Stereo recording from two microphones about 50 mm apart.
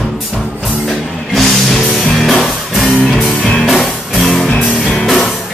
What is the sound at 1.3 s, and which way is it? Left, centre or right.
Music, centre.